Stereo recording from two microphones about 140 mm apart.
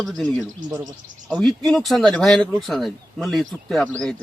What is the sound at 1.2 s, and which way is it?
Speech, centre (ahead or behind).